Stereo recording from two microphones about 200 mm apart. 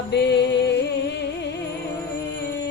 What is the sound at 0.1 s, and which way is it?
Music, 55° left (ahead or behind).